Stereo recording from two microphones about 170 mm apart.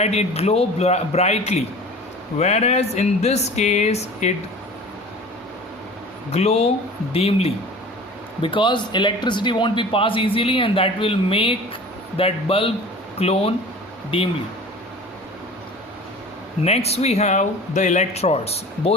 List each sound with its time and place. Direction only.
0.0 s speech: 40° left (ahead or behind)
6.3 s speech: 35° left (ahead or behind)
16.6 s speech: 35° left (ahead or behind)